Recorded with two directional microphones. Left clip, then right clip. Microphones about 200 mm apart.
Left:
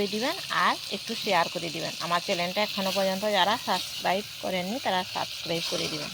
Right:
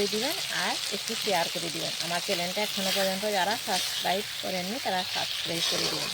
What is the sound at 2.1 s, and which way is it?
Speech, 15° left (ahead or behind).